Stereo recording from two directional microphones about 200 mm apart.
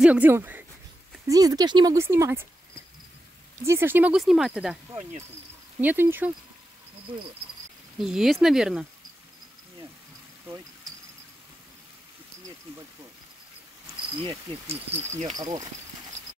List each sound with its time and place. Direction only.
0.0 s speech: 5° right (ahead or behind)
3.6 s speech: 10° right (ahead or behind)
5.8 s speech: 10° right (ahead or behind)
8.0 s speech: centre (ahead or behind)
14.2 s speech: 30° right (ahead or behind)
15.3 s speech: 20° right (ahead or behind)